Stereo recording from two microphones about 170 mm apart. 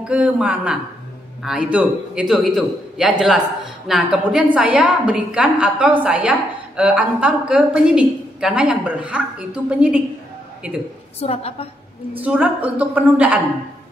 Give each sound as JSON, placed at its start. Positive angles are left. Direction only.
{"t": 0.1, "sound": "a woman's voice", "side_deg": -5}
{"t": 11.1, "sound": "a woman's voice", "side_deg": 35}
{"t": 12.2, "sound": "a woman's voice", "side_deg": -10}